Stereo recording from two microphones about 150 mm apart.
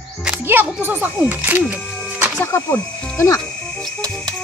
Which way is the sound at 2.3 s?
15° left (ahead or behind).